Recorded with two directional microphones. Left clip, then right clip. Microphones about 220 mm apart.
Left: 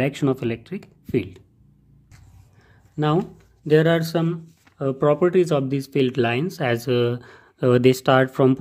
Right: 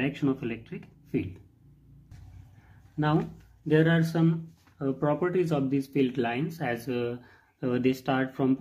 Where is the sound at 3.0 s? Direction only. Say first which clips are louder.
Left 6 dB; 35° left (ahead or behind).